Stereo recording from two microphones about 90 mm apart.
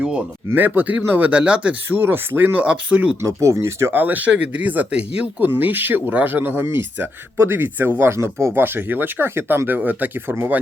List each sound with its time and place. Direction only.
0.0 s speech: 15° right (ahead or behind)
3.2 s speech: 35° right (ahead or behind)
3.9 s speech: 20° right (ahead or behind)